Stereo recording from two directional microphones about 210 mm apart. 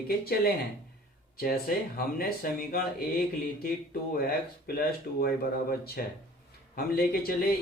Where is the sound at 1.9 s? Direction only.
45° left (ahead or behind).